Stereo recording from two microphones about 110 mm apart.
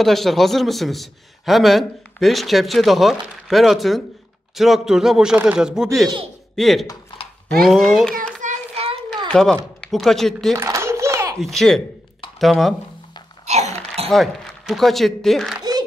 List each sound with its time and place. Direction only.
0.0 s a man's voice: centre (ahead or behind)
8.5 s child singing: 65° right (ahead or behind)
9.3 s a man's voice: 5° left (ahead or behind)
10.5 s a sound: 25° right (ahead or behind)
11.3 s a man's voice: 5° left (ahead or behind)
13.5 s a sound: 85° right
14.0 s speech: centre (ahead or behind)